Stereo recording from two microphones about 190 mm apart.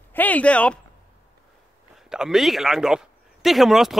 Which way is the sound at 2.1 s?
Centre (ahead or behind).